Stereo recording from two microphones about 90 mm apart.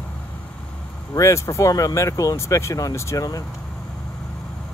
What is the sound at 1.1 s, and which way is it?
Speech, 35° left (ahead or behind).